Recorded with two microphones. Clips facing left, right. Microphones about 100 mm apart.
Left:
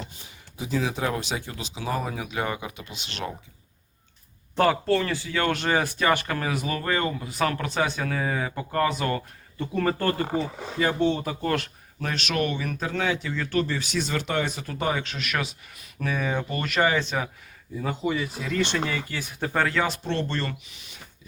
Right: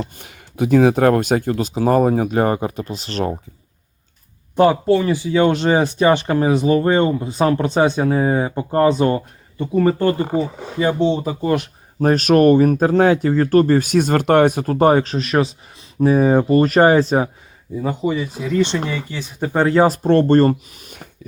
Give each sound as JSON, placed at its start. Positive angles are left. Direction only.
{"t": 0.0, "sound": "speech", "side_deg": -65}
{"t": 4.5, "sound": "speech", "side_deg": -15}
{"t": 9.7, "sound": "speech", "side_deg": -15}
{"t": 10.8, "sound": "speech", "side_deg": -20}
{"t": 11.9, "sound": "speech", "side_deg": -40}
{"t": 17.7, "sound": "speech", "side_deg": -15}
{"t": 19.7, "sound": "speech", "side_deg": -40}